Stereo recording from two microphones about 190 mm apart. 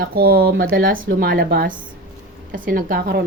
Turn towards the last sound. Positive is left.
turn(degrees=-60)  # may be behind; listen again after turning